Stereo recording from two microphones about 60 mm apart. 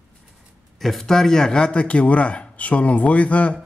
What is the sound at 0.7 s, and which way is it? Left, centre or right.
Speech, centre.